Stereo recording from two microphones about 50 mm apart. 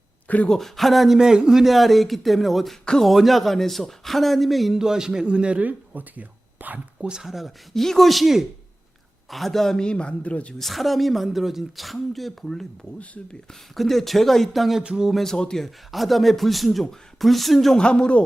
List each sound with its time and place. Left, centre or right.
0.4 s speech: centre
0.8 s speech: centre
4.8 s a man's voice: centre
5.6 s speech: right
7.0 s speech: centre; by 10.5 s left
10.6 s speech: centre
14.8 s a man's voice: centre
15.1 s speech: centre
15.6 s speech: centre
17.7 s speech: centre